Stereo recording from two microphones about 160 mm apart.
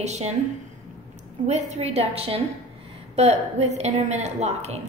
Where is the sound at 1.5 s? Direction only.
45° right (ahead or behind).